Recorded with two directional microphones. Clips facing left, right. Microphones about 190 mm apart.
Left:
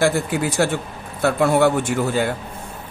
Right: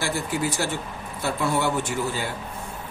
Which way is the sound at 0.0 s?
60° left (ahead or behind).